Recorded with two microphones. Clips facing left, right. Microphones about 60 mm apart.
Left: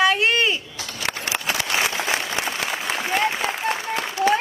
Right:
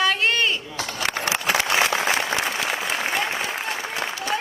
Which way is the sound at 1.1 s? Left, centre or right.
Right.